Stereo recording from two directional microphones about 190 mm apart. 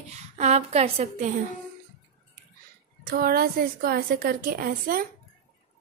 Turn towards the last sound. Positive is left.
turn(degrees=-45)  # may be behind; listen again after turning